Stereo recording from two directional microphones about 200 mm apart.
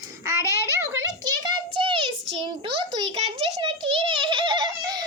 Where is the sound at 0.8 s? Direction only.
15° right (ahead or behind).